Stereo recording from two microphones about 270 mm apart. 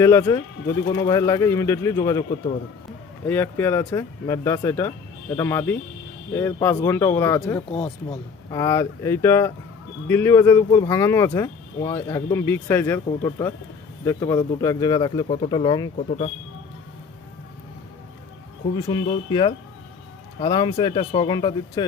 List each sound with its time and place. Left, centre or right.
0.0 s speech: centre
3.2 s speech: centre
7.7 s speech: left
18.8 s speech: centre